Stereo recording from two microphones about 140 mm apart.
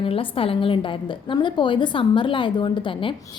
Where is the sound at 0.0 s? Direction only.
40° left (ahead or behind).